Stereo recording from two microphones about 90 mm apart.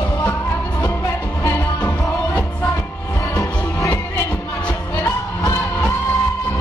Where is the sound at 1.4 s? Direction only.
40° left (ahead or behind).